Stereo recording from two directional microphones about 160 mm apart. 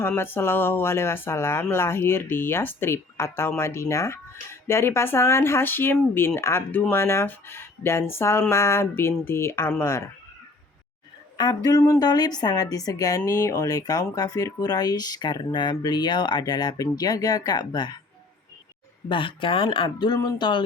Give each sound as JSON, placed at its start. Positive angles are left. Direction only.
{"t": 0.0, "sound": "speech", "side_deg": 15}
{"t": 11.3, "sound": "a woman's voice", "side_deg": 25}
{"t": 19.0, "sound": "speech", "side_deg": 30}